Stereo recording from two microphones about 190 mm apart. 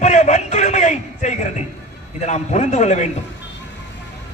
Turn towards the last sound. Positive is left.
turn(degrees=35)  # may be behind; listen again after turning